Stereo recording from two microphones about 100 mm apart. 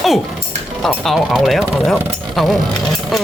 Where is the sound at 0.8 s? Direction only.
Centre (ahead or behind).